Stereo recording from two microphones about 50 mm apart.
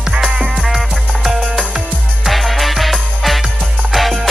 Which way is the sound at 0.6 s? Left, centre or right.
Centre.